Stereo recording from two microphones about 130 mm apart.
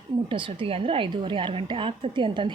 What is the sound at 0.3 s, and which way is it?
A woman's voice, 40° right (ahead or behind).